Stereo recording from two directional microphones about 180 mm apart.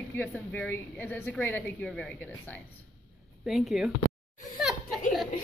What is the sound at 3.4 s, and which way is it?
Speech, centre (ahead or behind).